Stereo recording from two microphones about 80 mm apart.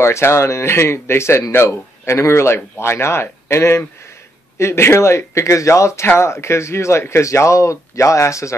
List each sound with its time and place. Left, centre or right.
0.0 s speech: left